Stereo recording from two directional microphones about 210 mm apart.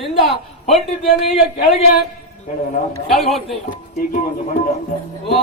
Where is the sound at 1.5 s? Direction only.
45° left (ahead or behind).